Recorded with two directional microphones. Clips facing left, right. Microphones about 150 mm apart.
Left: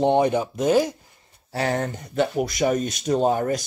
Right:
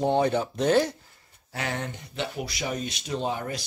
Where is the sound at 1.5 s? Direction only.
40° left (ahead or behind).